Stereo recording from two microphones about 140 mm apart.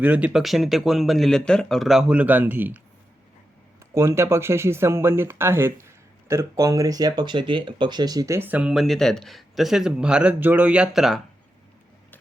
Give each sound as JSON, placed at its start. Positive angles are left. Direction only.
{"t": 0.0, "sound": "speech", "side_deg": -10}
{"t": 3.9, "sound": "speech", "side_deg": -20}